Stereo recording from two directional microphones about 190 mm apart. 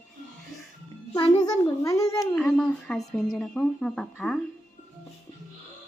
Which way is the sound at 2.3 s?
5° left (ahead or behind).